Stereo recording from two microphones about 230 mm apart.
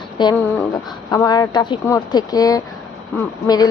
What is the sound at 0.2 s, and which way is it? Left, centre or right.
A woman's voice, centre.